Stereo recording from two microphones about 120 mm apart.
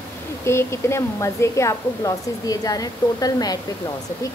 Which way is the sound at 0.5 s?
20° left (ahead or behind).